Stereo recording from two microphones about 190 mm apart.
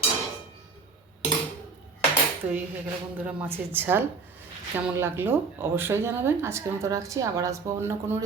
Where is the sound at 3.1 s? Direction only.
10° right (ahead or behind).